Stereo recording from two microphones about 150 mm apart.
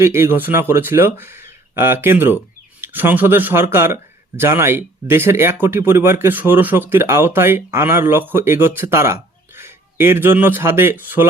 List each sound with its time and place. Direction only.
0.0 s speech: 15° right (ahead or behind)